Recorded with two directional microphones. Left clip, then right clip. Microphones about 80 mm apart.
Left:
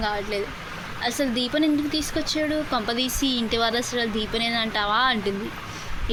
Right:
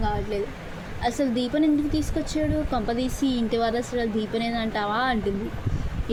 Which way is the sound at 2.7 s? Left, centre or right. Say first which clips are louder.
Left 2 dB; centre.